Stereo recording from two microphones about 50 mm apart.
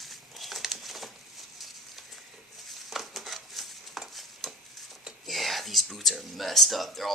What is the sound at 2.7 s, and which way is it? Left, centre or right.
Stir, centre.